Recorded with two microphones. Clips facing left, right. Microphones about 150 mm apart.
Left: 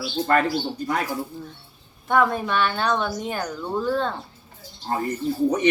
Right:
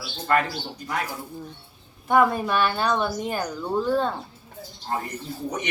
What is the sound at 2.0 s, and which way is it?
Speech, 10° right (ahead or behind).